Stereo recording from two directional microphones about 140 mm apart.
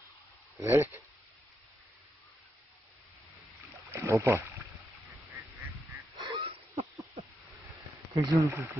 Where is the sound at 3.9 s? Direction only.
20° right (ahead or behind).